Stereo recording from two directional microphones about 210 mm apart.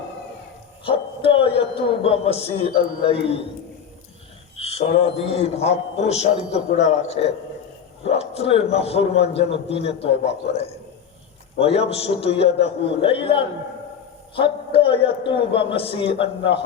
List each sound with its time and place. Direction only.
0.9 s a man's voice: 25° left (ahead or behind)
4.5 s a man's voice: 30° left (ahead or behind)